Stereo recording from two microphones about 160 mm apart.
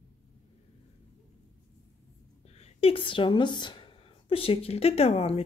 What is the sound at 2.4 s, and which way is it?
Speech, 40° left (ahead or behind).